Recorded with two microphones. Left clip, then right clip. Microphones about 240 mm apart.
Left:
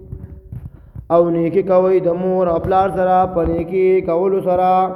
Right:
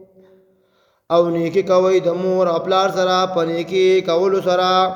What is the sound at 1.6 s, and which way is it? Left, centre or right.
Mantra, centre.